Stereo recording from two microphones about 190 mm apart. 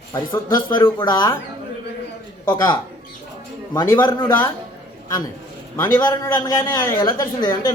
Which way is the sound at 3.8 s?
20° left (ahead or behind).